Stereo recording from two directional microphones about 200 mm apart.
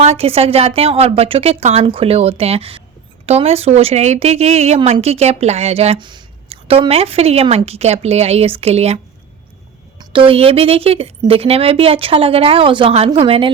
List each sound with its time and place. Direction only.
0.0 s a woman's voice: 30° right (ahead or behind)
10.0 s a woman's voice: 25° right (ahead or behind)